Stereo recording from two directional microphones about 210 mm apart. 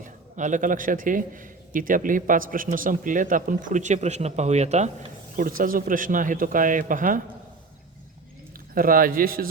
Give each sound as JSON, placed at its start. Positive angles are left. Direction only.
{"t": 0.0, "sound": "a man's voice", "side_deg": -35}
{"t": 8.7, "sound": "speech", "side_deg": -40}